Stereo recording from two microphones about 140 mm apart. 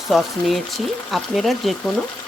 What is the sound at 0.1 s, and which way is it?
Speech, centre (ahead or behind).